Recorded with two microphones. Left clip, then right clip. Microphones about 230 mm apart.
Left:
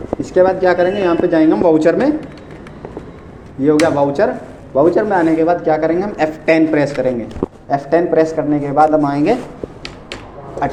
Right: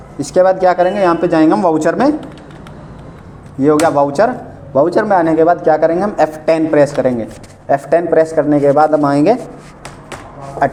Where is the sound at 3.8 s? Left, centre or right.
Right.